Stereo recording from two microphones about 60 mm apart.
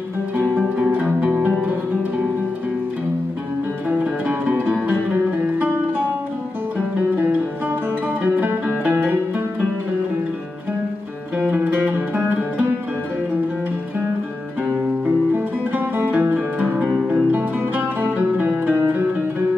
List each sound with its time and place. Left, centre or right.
0.4 s music: right
4.0 s music: right
8.1 s music: right
11.5 s music: right
15.0 s music: right